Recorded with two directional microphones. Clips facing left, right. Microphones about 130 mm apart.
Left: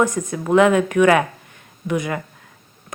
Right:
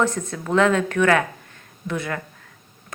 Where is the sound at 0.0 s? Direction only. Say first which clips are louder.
Left 3 dB; 15° left (ahead or behind).